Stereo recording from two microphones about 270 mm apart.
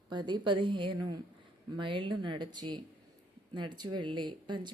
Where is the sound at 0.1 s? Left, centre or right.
Centre.